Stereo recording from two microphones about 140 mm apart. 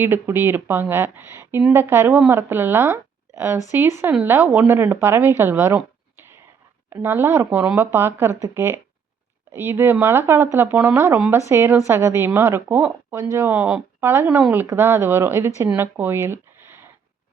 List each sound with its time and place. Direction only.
0.0 s a woman's voice: 15° right (ahead or behind)
5.4 s a sound: 15° right (ahead or behind)
6.9 s a woman's voice: 15° right (ahead or behind)